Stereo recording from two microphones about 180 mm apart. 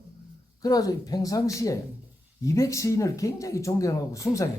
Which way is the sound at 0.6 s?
20° left (ahead or behind).